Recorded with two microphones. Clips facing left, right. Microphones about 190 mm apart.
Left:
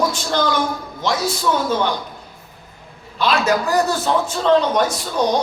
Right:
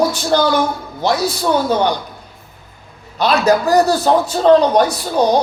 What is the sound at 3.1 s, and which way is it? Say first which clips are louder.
Speech: right 4 dB; 40° right (ahead or behind).